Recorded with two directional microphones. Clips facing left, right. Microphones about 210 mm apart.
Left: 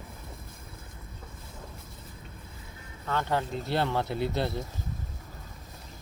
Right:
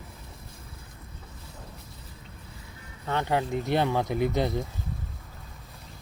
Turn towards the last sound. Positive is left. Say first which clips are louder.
# right 3 dB
turn(degrees=-15)  # may be behind; listen again after turning